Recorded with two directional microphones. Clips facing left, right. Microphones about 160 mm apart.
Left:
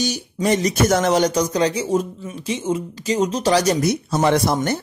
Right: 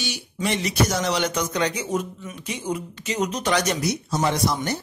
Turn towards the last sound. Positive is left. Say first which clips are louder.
# left 6 dB
turn(degrees=55)  # may be behind; listen again after turning